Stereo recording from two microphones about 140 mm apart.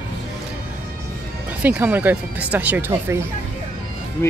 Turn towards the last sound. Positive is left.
turn(degrees=-15)  # may be behind; listen again after turning